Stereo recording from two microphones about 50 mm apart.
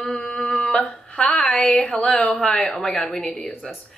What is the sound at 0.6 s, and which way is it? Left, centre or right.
Speech, centre.